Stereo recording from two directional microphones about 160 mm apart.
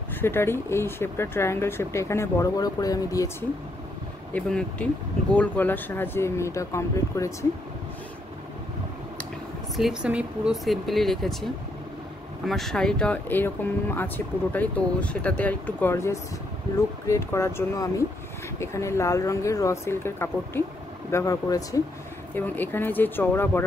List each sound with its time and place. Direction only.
0.1 s speech: 15° left (ahead or behind)
4.3 s speech: 5° left (ahead or behind)
9.8 s speech: 5° right (ahead or behind)
12.4 s speech: centre (ahead or behind)